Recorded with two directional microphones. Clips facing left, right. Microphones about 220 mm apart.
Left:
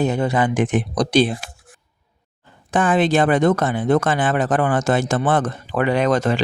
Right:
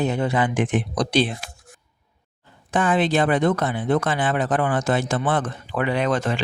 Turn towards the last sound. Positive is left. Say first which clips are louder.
# left 4 dB
turn(degrees=40)  # may be behind; listen again after turning